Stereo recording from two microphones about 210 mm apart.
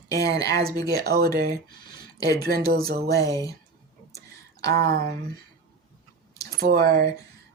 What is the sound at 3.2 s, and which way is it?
Speech, 15° left (ahead or behind).